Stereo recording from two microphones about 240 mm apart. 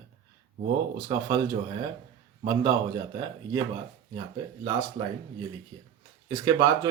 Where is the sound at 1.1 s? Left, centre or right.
Right.